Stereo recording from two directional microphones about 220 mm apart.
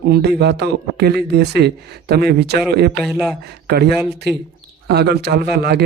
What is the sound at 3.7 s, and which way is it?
A man's voice, 45° right (ahead or behind).